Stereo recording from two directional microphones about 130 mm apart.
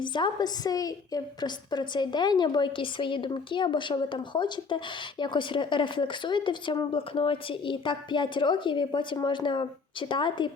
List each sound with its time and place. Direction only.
0.0 s speech: 35° left (ahead or behind)